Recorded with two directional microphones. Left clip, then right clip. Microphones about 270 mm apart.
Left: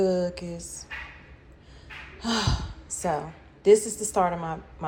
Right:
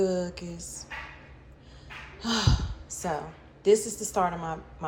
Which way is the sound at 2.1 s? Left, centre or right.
Centre.